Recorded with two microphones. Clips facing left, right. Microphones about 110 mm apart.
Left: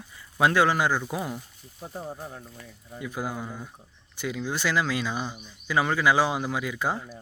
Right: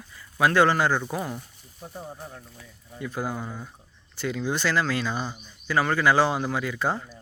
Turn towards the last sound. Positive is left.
turn(degrees=10)  # may be behind; listen again after turning